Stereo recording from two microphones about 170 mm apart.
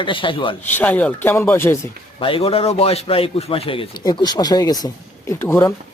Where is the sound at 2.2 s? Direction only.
30° left (ahead or behind); by 5.7 s 15° left (ahead or behind).